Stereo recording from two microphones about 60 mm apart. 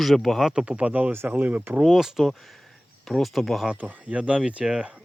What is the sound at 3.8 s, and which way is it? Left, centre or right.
Speech, right.